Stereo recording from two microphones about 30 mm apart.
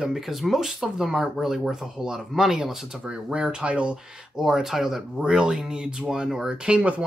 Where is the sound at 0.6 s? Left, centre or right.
Centre.